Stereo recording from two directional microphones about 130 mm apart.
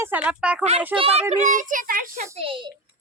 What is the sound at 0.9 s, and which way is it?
A child's voice, 50° right (ahead or behind).